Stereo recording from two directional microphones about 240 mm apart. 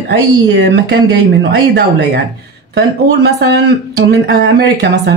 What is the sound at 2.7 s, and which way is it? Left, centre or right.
Speech, right.